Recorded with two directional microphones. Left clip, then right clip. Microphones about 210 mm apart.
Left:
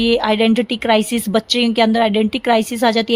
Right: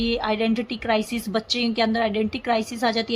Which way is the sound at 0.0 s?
45° left (ahead or behind).